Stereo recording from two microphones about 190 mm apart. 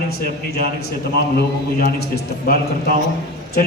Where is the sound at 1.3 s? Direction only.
55° left (ahead or behind).